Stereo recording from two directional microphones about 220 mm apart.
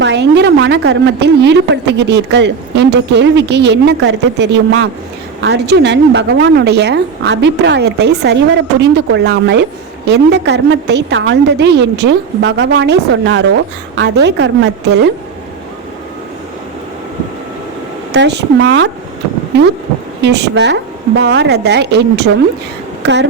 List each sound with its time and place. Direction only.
0.0 s a woman's voice: 50° right (ahead or behind)
18.1 s a woman's voice: 50° right (ahead or behind)
20.2 s a woman's voice: 50° right (ahead or behind)